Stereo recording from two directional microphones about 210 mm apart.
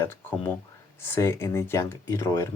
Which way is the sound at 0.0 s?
10° left (ahead or behind).